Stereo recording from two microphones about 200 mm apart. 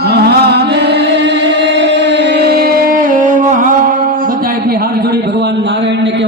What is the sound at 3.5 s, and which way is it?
Music, 40° right (ahead or behind).